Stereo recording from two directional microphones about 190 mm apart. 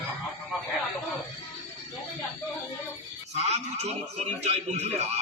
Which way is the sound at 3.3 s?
35° right (ahead or behind).